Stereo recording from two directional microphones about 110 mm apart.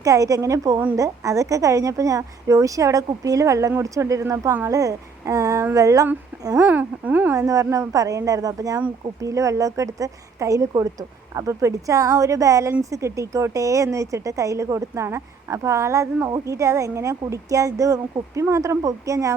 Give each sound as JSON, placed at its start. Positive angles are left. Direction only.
{"t": 0.0, "sound": "a woman's voice", "side_deg": -30}
{"t": 6.7, "sound": "speech", "side_deg": -15}
{"t": 7.3, "sound": "a woman's voice", "side_deg": -30}